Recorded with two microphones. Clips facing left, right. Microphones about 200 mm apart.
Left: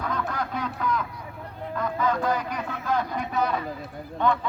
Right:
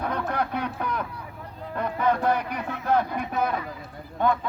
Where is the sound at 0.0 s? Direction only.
60° right (ahead or behind).